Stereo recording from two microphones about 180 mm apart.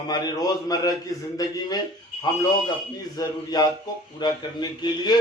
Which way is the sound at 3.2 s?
20° left (ahead or behind).